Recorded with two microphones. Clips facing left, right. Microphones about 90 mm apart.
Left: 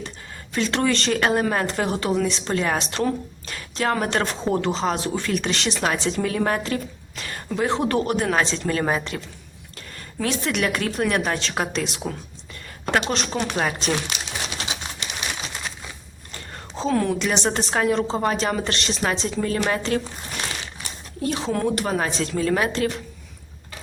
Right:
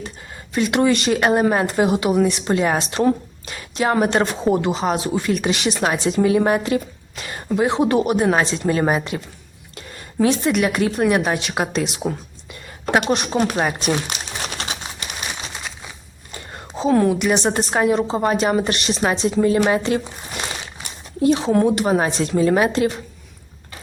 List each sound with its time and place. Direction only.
0.5 s a woman's voice: 15° right (ahead or behind)
9.7 s a sound: 20° right (ahead or behind)
10.7 s a woman's voice: 10° right (ahead or behind)
15.2 s crumpling: 10° right (ahead or behind)
16.3 s a woman's voice: 10° right (ahead or behind)